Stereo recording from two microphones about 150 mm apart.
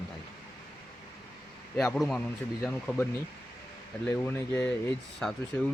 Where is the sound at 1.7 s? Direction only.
Centre (ahead or behind).